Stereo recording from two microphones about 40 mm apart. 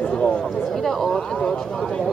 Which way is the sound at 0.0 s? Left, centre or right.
Left.